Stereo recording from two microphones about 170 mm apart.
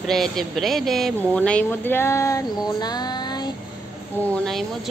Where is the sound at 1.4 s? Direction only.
10° left (ahead or behind); by 3.5 s 25° left (ahead or behind).